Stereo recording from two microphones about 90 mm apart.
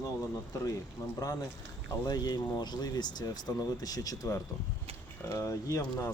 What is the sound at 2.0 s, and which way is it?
Speech, 50° left (ahead or behind).